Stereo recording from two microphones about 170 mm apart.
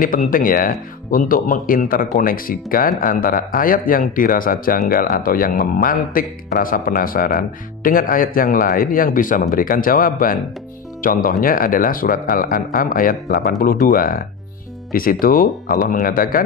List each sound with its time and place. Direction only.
0.0 s speech: 55° left (ahead or behind)